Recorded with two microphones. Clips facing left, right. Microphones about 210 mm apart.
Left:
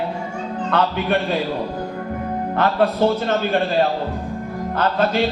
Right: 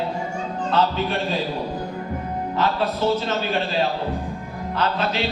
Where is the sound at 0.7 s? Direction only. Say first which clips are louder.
Left 2 dB; 60° left (ahead or behind).